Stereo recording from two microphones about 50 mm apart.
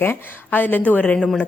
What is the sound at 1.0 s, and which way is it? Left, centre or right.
Speech, left.